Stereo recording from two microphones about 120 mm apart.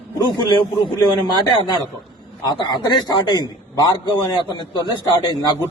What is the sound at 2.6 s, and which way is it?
A man's voice, 35° left (ahead or behind).